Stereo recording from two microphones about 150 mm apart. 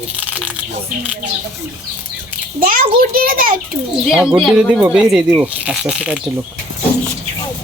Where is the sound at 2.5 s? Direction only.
70° right (ahead or behind).